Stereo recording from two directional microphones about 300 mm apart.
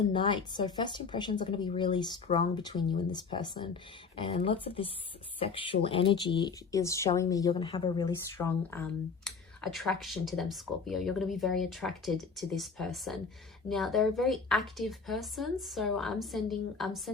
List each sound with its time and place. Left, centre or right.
0.1 s a woman's voice: centre